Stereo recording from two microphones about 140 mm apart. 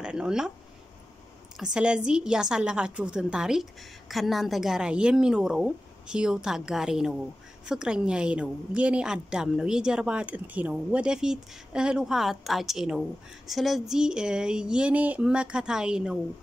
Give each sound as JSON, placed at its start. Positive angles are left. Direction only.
{"t": 0.0, "sound": "speech", "side_deg": -5}
{"t": 1.6, "sound": "a woman's voice", "side_deg": -5}